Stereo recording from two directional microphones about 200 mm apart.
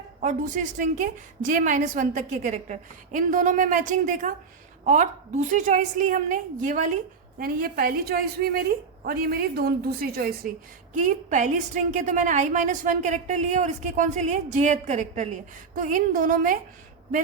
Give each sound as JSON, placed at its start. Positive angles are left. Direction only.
{"t": 0.2, "sound": "a woman's voice", "side_deg": -40}
{"t": 10.9, "sound": "a woman's voice", "side_deg": -40}